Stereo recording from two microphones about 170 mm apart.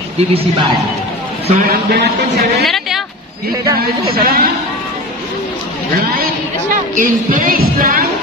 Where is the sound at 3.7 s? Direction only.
60° right (ahead or behind).